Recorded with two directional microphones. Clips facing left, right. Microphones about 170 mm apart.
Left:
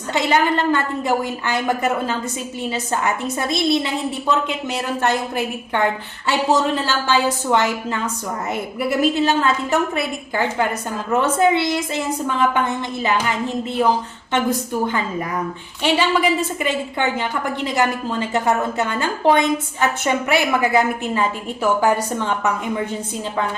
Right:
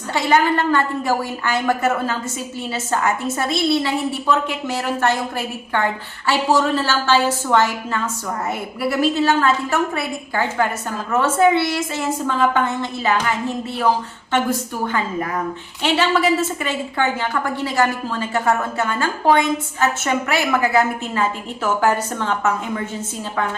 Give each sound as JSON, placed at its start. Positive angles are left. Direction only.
{"t": 0.1, "sound": "a woman's voice", "side_deg": 20}
{"t": 6.2, "sound": "a woman's voice", "side_deg": 20}
{"t": 14.3, "sound": "a woman's voice", "side_deg": 15}